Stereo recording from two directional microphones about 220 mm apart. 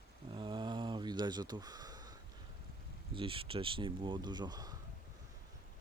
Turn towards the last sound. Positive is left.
turn(degrees=-15)  # may be behind; listen again after turning